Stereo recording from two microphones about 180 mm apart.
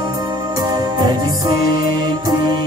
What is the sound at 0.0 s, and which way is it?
Music, 20° right (ahead or behind).